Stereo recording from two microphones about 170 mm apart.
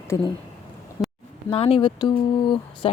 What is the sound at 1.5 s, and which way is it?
A woman's voice, 35° left (ahead or behind).